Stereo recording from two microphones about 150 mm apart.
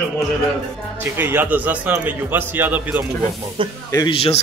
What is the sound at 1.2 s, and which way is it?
A man's voice, 15° right (ahead or behind).